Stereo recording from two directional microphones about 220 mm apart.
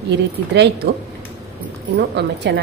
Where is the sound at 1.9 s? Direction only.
50° right (ahead or behind).